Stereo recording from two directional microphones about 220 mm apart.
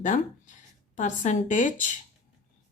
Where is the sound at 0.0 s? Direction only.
35° left (ahead or behind).